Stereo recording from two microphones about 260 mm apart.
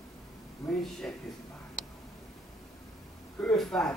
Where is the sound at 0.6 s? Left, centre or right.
Centre.